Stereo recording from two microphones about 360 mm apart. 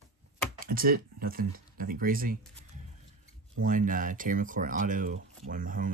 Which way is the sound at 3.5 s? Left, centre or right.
Right.